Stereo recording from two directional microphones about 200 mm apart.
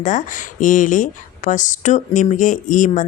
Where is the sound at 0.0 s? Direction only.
40° left (ahead or behind).